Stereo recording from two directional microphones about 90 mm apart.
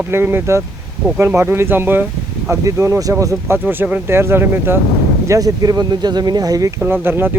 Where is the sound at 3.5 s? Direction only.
25° right (ahead or behind).